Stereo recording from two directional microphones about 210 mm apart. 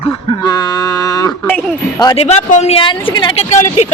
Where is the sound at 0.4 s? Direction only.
15° left (ahead or behind).